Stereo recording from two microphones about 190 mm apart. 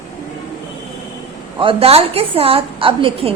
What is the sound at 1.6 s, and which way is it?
A woman's voice, 30° right (ahead or behind).